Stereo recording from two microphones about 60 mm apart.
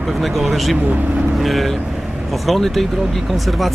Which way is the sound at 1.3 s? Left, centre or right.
Centre.